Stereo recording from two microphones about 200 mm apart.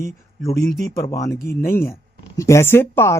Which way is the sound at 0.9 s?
15° left (ahead or behind).